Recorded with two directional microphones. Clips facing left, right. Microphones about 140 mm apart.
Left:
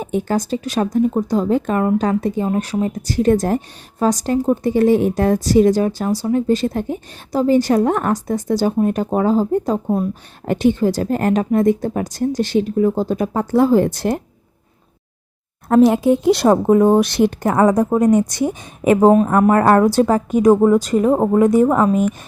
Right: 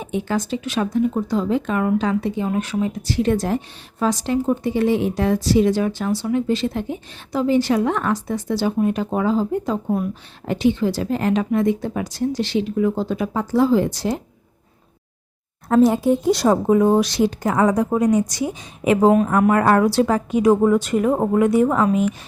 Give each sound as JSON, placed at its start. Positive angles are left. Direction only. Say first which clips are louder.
{"t": 0.0, "sound": "speech", "louder": "left 3 dB", "side_deg": 45}
{"t": 9.8, "sound": "speech", "louder": "left 3 dB", "side_deg": 30}
{"t": 10.4, "sound": "speech", "louder": "left 3 dB", "side_deg": 50}
{"t": 15.7, "sound": "speech", "louder": "left 3 dB", "side_deg": 80}